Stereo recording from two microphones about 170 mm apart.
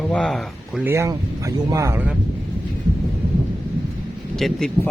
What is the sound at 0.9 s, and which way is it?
Speech, 15° right (ahead or behind).